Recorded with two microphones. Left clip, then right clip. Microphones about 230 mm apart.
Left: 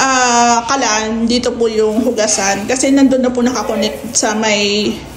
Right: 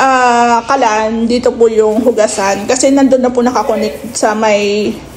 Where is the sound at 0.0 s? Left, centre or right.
Right.